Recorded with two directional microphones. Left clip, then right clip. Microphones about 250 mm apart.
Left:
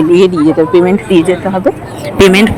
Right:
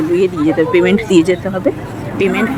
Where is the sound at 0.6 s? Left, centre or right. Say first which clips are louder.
Left 2 dB; centre.